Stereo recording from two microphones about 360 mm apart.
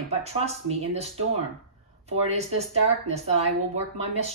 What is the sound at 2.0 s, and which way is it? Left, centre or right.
Speech, centre.